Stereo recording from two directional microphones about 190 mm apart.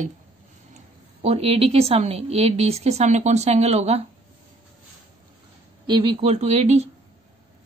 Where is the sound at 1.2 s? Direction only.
30° right (ahead or behind).